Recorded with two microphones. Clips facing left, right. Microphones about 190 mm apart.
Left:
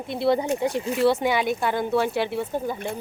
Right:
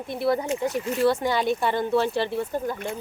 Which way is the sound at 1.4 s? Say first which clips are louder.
Even; 5° left (ahead or behind).